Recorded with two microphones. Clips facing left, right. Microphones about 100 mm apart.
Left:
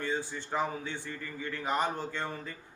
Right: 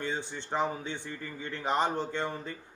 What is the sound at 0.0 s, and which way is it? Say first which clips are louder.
Speech: left 1 dB; 20° right (ahead or behind).